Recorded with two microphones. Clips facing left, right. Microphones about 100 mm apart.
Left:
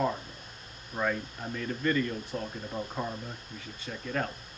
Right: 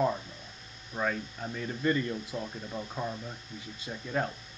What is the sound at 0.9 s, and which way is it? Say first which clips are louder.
Speech: left 1 dB; 5° left (ahead or behind).